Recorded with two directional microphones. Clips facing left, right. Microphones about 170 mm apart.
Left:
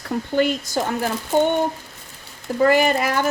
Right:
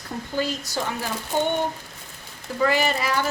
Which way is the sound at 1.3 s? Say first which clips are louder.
Left 6 dB; 45° left (ahead or behind).